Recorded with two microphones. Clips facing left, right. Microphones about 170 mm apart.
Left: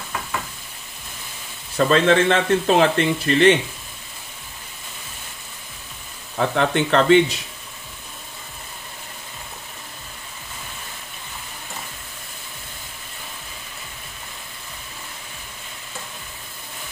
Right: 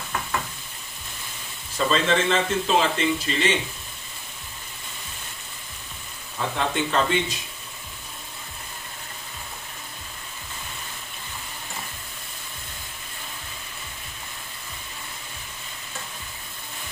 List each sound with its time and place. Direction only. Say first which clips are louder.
1.9 s speech: left 5 dB; 60° left (ahead or behind)
6.3 s speech: left 6 dB; 65° left (ahead or behind)